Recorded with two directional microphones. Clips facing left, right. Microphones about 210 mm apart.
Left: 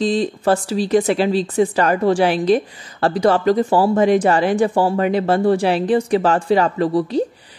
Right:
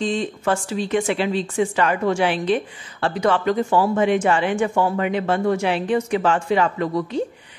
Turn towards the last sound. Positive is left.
turn(degrees=35)  # may be behind; listen again after turning